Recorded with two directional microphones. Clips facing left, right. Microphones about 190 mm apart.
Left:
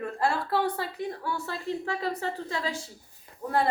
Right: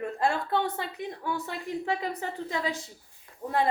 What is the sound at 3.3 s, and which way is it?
Speech, 20° left (ahead or behind).